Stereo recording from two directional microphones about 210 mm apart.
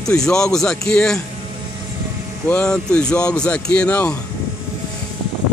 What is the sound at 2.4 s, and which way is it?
A man's voice, 5° left (ahead or behind).